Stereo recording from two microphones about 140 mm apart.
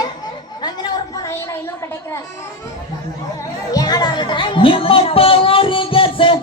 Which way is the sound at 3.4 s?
25° left (ahead or behind).